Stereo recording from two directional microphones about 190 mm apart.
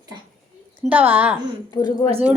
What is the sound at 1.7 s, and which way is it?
Speech, 20° left (ahead or behind).